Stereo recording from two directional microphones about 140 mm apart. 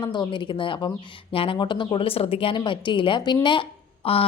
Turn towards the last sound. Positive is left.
turn(degrees=40)  # may be behind; listen again after turning